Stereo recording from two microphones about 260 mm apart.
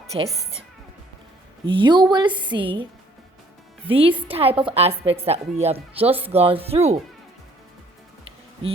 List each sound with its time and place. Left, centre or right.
1.6 s a woman's voice: centre
3.8 s a woman's voice: right